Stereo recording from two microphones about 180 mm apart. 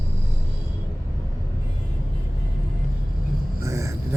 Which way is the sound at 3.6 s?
15° right (ahead or behind).